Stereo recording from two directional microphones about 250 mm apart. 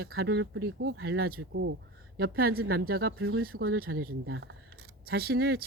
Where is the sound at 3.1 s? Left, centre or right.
Right.